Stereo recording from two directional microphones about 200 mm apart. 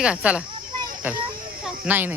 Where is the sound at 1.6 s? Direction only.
10° right (ahead or behind).